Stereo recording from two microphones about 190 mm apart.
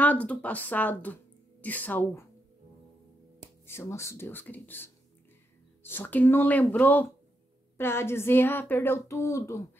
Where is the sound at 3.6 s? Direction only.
15° left (ahead or behind).